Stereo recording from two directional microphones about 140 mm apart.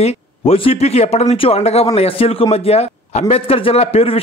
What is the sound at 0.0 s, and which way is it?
A man's voice, 45° left (ahead or behind).